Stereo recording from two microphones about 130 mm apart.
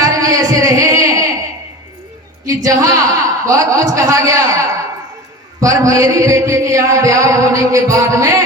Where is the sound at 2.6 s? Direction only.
25° right (ahead or behind).